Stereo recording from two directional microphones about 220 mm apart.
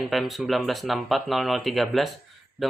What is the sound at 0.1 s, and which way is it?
Speech, centre (ahead or behind).